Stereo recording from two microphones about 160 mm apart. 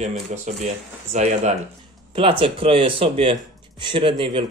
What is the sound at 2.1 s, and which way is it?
A man's voice, 35° right (ahead or behind).